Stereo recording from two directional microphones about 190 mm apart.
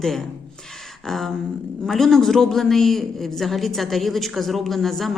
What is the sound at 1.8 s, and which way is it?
A man's voice, centre (ahead or behind).